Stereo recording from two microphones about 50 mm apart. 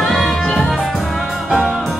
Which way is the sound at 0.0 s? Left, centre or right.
Centre.